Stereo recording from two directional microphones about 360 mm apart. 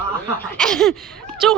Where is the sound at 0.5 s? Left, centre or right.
Centre.